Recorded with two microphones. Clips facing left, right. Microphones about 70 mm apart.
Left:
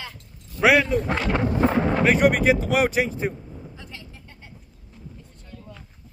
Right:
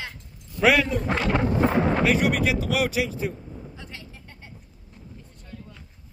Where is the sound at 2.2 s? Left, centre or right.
Left.